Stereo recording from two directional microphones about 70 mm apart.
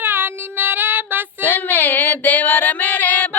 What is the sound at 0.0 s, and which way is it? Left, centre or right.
Child singing, right.